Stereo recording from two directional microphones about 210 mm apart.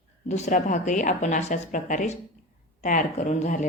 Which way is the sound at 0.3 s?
35° left (ahead or behind).